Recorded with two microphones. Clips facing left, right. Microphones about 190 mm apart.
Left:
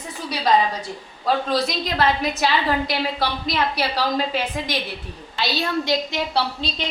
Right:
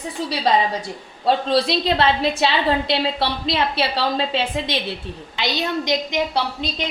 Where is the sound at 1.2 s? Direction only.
30° right (ahead or behind).